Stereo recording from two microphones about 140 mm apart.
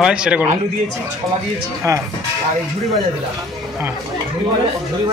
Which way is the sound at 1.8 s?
20° right (ahead or behind).